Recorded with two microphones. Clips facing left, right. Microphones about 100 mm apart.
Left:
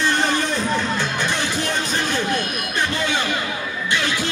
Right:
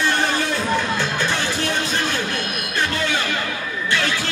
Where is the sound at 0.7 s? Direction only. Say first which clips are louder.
Right 1 dB; 15° right (ahead or behind).